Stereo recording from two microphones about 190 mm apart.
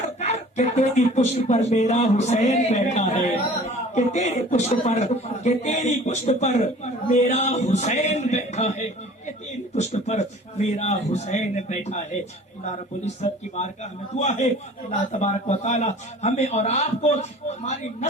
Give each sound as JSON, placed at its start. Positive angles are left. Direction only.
{"t": 0.2, "sound": "a man's voice", "side_deg": 35}
{"t": 9.7, "sound": "a man's voice", "side_deg": 35}
{"t": 14.2, "sound": "a man's voice", "side_deg": 35}